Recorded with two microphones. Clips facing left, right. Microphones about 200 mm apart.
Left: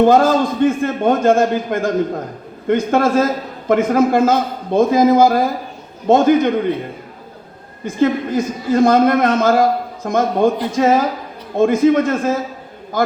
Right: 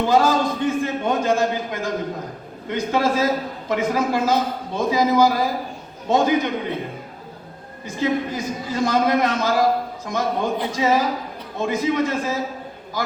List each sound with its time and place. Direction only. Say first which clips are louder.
0.0 s a man's voice: left 6 dB; 55° left (ahead or behind)
7.9 s a man's voice: left 6 dB; 55° left (ahead or behind)